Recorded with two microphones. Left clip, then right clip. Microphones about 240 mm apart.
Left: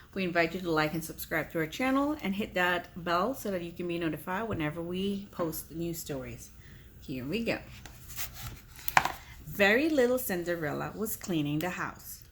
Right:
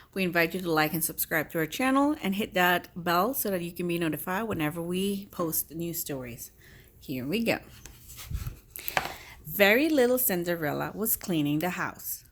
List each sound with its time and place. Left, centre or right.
0.1 s a woman's voice: right
9.6 s a woman's voice: right